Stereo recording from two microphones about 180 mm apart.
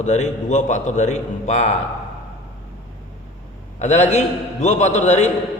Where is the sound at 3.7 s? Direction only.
40° left (ahead or behind).